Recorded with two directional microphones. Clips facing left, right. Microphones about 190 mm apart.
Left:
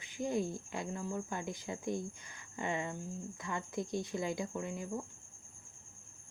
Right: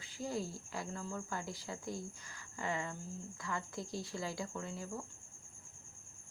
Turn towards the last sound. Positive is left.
turn(degrees=20)  # may be behind; listen again after turning